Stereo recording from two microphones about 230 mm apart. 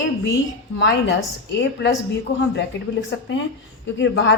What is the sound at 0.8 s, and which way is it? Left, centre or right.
Speech, left.